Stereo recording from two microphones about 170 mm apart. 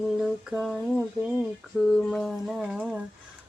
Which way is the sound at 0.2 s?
Centre (ahead or behind).